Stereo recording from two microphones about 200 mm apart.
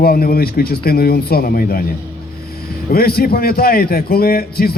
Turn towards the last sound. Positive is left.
turn(degrees=50)  # may be behind; listen again after turning